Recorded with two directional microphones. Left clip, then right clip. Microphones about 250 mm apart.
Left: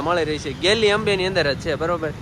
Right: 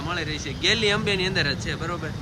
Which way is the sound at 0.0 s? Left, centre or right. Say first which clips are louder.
Left 8 dB; centre.